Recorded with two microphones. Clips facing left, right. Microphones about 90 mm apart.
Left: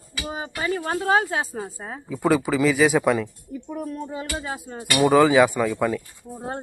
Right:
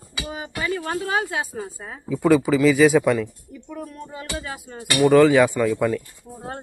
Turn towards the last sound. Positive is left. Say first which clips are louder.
# right 2 dB
turn(degrees=5)  # may be behind; listen again after turning